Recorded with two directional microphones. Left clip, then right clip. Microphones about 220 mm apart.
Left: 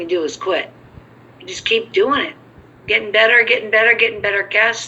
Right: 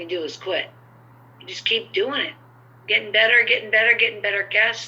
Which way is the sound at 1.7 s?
20° left (ahead or behind).